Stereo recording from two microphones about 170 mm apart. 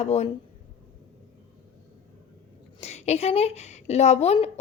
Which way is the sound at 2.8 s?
40° left (ahead or behind).